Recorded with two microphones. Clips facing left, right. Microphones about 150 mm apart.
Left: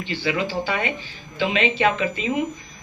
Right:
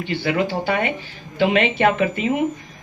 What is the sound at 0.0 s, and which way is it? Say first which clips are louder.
A man's voice: right 3 dB; 55° right (ahead or behind).